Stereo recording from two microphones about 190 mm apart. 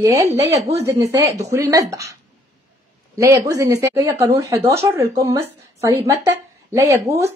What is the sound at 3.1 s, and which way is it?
Speech, 15° right (ahead or behind).